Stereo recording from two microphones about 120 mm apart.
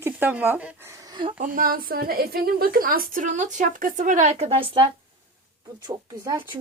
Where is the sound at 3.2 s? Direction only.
90° right; by 4.9 s 50° right (ahead or behind).